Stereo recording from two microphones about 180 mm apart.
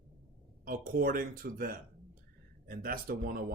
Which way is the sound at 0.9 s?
50° right (ahead or behind).